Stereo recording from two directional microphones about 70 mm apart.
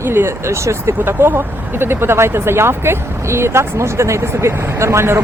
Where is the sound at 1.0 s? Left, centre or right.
Right.